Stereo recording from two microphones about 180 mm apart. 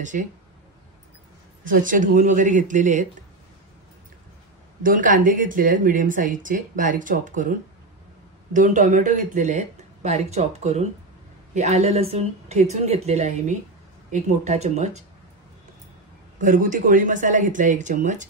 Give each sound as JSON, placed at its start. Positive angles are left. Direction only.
{"t": 0.0, "sound": "speech", "side_deg": -45}
{"t": 1.7, "sound": "speech", "side_deg": -45}
{"t": 4.8, "sound": "speech", "side_deg": -45}
{"t": 8.5, "sound": "speech", "side_deg": -45}
{"t": 16.3, "sound": "speech", "side_deg": -45}